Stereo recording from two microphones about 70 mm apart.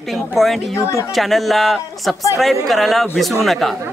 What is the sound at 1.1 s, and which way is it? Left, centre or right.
Speech, centre.